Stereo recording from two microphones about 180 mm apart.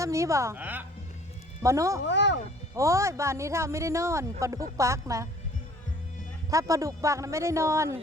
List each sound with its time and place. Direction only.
0.0 s speech: 15° right (ahead or behind)
2.0 s speech: 75° left (ahead or behind)
2.7 s speech: 15° right (ahead or behind)
6.5 s speech: 20° right (ahead or behind)